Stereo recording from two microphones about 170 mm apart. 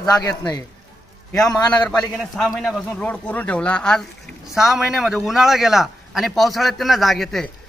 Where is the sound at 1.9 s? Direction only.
Centre (ahead or behind).